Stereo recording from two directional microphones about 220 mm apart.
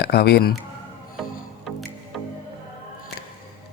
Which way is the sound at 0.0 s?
45° left (ahead or behind).